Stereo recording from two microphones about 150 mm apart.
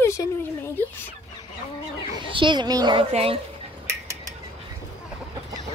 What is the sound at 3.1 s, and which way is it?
Speech, 45° right (ahead or behind).